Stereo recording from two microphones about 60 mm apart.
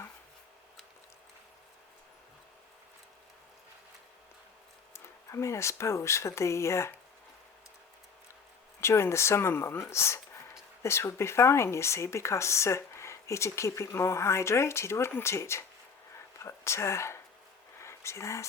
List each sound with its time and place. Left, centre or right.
4.9 s speech: left
8.8 s speech: left
17.7 s a sound: left